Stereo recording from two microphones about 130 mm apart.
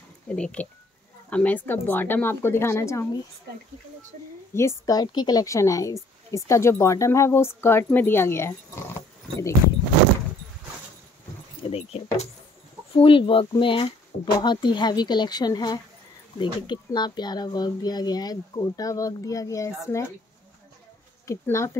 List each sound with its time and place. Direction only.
0.3 s speech: 10° left (ahead or behind)
4.6 s a woman's voice: 25° left (ahead or behind)
11.7 s speech: 50° left (ahead or behind); by 19.7 s 25° left (ahead or behind)
21.3 s a woman's voice: 25° left (ahead or behind)